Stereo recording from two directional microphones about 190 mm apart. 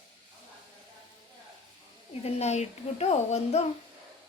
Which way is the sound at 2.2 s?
35° left (ahead or behind).